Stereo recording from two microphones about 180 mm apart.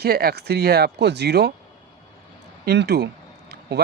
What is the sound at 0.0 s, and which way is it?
Speech, 60° right (ahead or behind).